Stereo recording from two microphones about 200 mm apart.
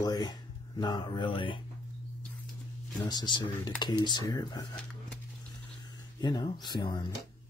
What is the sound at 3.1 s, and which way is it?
Speech, 20° left (ahead or behind).